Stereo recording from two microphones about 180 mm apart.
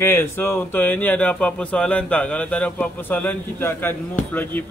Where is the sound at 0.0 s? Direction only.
15° left (ahead or behind).